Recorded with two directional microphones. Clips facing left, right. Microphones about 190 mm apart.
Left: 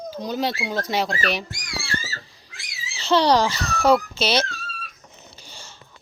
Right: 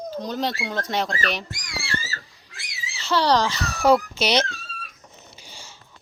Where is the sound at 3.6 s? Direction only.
10° right (ahead or behind).